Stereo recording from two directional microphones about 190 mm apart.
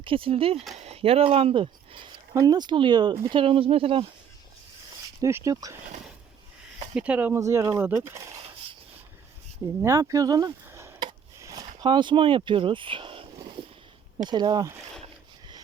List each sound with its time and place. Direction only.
0.0 s speech: 30° right (ahead or behind)
5.2 s speech: 15° right (ahead or behind)
6.9 s speech: 5° right (ahead or behind)
9.8 s a sound: 15° right (ahead or behind)
11.8 s speech: 25° right (ahead or behind)